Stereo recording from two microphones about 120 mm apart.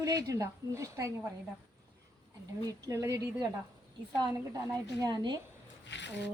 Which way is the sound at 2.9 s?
25° right (ahead or behind).